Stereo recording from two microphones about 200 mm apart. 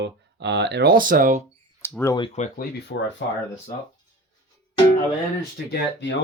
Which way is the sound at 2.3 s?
45° left (ahead or behind).